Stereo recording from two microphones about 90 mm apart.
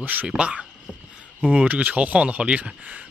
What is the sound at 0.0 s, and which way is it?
Speech, 20° right (ahead or behind).